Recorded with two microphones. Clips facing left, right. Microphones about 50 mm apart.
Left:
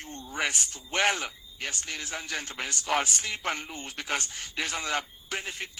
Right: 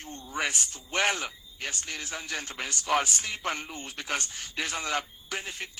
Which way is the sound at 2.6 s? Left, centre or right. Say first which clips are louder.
Right 1 dB; left.